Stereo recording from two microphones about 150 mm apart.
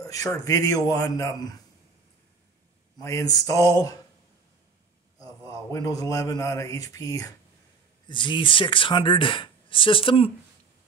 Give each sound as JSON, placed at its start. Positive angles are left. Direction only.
{"t": 0.0, "sound": "a man's voice", "side_deg": 20}
{"t": 3.0, "sound": "a man's voice", "side_deg": 20}
{"t": 5.2, "sound": "a man's voice", "side_deg": 25}